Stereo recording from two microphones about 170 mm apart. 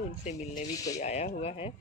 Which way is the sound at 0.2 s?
40° left (ahead or behind).